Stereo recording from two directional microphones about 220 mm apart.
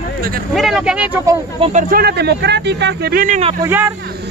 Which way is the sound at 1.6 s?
35° right (ahead or behind).